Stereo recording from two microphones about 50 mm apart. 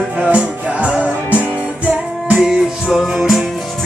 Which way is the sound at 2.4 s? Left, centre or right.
Centre.